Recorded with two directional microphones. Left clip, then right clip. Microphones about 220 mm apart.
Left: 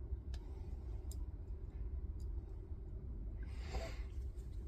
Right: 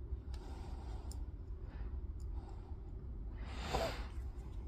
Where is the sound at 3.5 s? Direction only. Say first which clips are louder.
Right 11 dB; 40° right (ahead or behind).